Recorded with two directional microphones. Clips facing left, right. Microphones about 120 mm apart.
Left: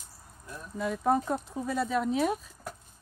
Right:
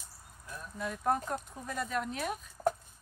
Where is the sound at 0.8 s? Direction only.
5° left (ahead or behind).